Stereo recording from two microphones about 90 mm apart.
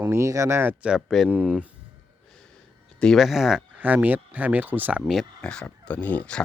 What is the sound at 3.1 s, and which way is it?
Speech, centre (ahead or behind).